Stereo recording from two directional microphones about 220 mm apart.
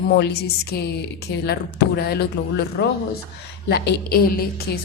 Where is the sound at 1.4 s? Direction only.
45° left (ahead or behind).